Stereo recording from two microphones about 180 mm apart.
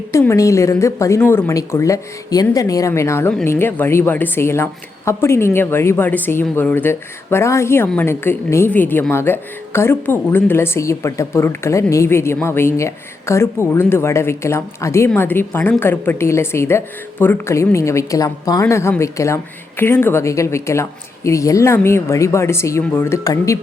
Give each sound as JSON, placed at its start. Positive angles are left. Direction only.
{"t": 0.1, "sound": "speech", "side_deg": 15}